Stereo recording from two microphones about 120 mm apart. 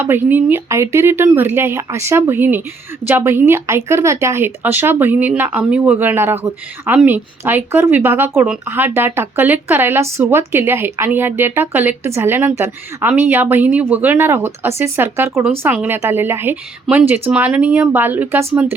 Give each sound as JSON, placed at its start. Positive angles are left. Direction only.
{"t": 0.0, "sound": "a woman's voice", "side_deg": -15}